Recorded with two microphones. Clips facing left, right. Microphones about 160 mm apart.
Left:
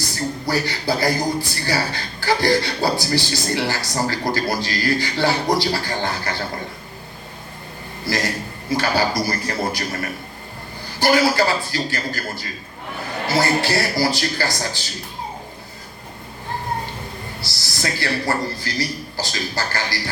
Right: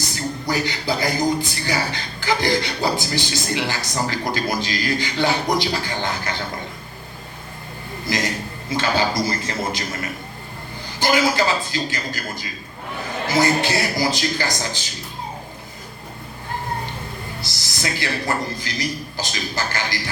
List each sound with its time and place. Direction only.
0.0 s speech: 20° right (ahead or behind)
8.0 s a man's voice: 20° right (ahead or behind)
17.4 s speech: 20° right (ahead or behind)